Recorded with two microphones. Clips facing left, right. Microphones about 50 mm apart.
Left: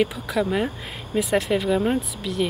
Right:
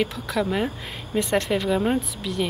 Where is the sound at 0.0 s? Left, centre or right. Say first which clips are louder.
Left 2 dB; centre.